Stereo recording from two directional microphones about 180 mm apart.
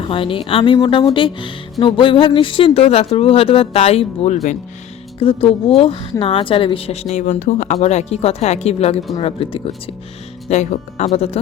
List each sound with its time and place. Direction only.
0.0 s a woman's voice: 30° left (ahead or behind)
10.5 s a woman's voice: 40° left (ahead or behind)